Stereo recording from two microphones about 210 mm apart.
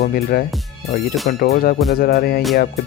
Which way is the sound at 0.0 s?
45° left (ahead or behind).